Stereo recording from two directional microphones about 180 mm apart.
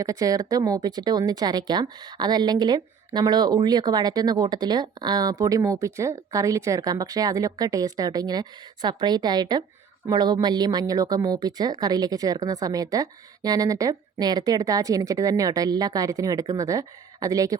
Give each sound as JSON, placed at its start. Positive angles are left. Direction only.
{"t": 0.0, "sound": "speech", "side_deg": -20}